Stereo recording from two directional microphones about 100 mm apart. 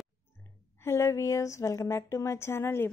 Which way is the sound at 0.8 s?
30° left (ahead or behind).